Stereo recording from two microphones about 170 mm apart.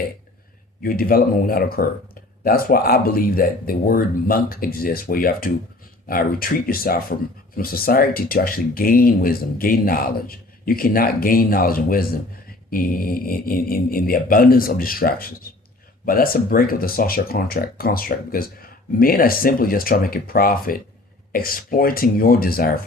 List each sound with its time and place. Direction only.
0.8 s speech: 60° left (ahead or behind)